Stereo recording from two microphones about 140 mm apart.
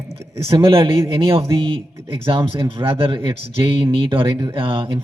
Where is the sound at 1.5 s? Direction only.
40° right (ahead or behind).